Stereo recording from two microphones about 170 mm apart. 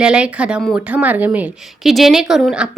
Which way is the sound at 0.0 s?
5° right (ahead or behind).